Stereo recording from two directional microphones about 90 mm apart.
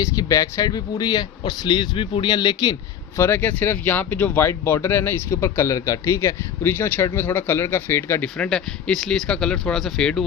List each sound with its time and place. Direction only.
0.0 s speech: 40° left (ahead or behind)
3.2 s speech: 25° left (ahead or behind)
6.7 s speech: 20° left (ahead or behind)
8.2 s speech: 10° left (ahead or behind)